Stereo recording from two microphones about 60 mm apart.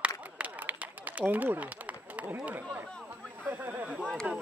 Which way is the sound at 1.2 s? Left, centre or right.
Right.